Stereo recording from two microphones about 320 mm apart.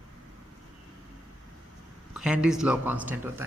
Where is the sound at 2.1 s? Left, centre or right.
Centre.